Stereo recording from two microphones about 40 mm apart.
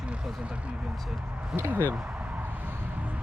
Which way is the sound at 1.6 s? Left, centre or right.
Right.